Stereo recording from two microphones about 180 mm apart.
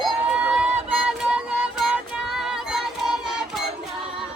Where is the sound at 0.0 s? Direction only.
5° right (ahead or behind).